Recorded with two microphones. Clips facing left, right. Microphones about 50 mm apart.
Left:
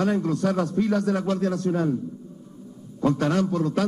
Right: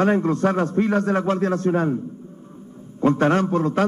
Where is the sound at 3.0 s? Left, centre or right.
Right.